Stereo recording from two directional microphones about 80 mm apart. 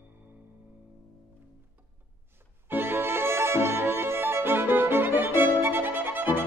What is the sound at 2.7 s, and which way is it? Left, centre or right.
Violin, right.